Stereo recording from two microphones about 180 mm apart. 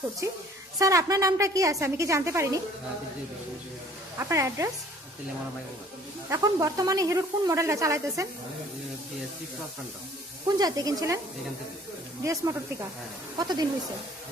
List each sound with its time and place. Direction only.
0.8 s speech: 20° right (ahead or behind)
4.2 s speech: 15° right (ahead or behind)
6.2 s speech: 15° right (ahead or behind)
10.6 s speech: 20° right (ahead or behind)
12.2 s speech: 15° right (ahead or behind)